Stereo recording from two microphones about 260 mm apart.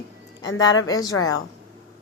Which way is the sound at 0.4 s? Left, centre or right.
Left.